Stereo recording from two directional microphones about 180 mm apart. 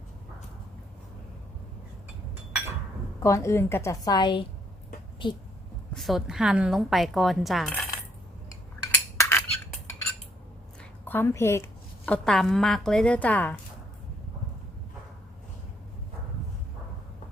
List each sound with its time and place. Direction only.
3.2 s a woman's voice: 15° left (ahead or behind)
6.0 s speech: centre (ahead or behind)
8.8 s cutlery: 15° left (ahead or behind)
11.0 s a woman's voice: 10° left (ahead or behind)